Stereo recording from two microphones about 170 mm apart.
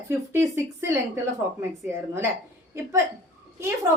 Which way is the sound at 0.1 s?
15° right (ahead or behind).